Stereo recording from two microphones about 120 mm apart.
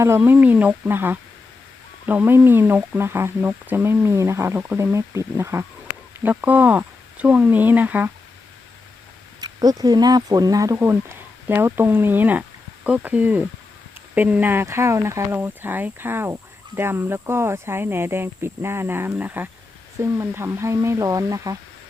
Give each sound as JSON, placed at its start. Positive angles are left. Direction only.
{"t": 0.0, "sound": "speech", "side_deg": -20}
{"t": 9.4, "sound": "speech", "side_deg": -30}
{"t": 10.8, "sound": "speech", "side_deg": -20}